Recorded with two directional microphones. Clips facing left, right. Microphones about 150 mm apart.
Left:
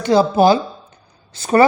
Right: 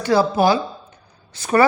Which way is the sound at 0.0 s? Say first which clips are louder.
Left 3 dB; 20° left (ahead or behind).